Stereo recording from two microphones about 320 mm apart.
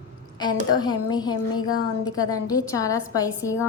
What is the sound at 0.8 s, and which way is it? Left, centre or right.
A woman's voice, centre.